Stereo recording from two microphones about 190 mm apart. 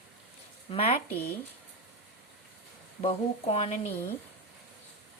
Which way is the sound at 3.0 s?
30° left (ahead or behind).